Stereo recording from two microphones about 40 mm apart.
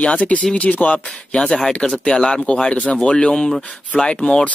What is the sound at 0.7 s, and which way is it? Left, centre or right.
Speech, left.